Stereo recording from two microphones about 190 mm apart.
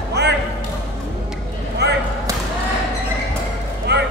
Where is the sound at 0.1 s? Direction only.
60° right (ahead or behind).